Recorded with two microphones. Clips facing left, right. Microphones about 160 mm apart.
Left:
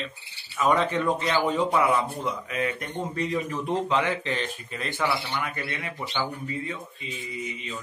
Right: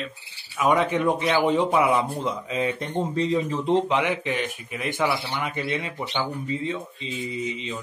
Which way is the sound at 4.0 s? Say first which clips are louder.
Right 2 dB; 15° right (ahead or behind).